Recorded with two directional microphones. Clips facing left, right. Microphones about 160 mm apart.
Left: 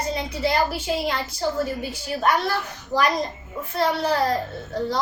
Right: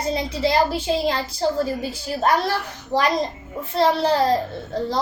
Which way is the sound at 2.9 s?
25° right (ahead or behind).